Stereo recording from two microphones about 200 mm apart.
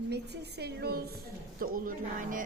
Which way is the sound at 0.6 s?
50° right (ahead or behind).